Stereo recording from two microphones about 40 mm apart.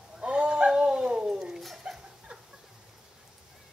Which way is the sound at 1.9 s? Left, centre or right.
Right.